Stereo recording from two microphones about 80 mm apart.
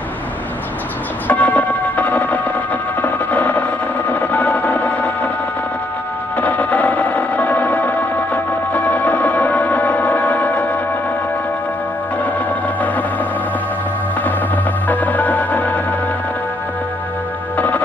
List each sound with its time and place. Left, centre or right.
1.2 s music: centre
3.0 s a sound: left
6.3 s music: centre
12.2 s music: left
14.9 s music: centre
17.6 s music: centre